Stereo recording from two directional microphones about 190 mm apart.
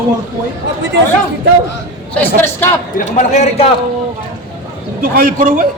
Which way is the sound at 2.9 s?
40° left (ahead or behind).